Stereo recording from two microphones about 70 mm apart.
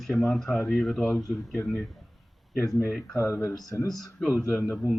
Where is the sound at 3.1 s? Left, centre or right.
Left.